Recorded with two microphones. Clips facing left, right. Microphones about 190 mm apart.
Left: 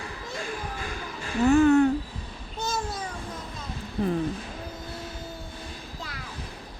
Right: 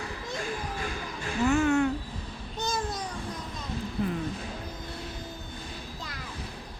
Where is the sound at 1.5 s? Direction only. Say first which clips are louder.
Left 6 dB; 35° left (ahead or behind).